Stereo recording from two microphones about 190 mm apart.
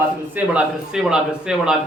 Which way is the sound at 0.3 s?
5° right (ahead or behind).